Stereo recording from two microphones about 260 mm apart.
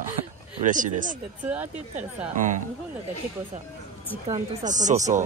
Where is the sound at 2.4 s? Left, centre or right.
Right.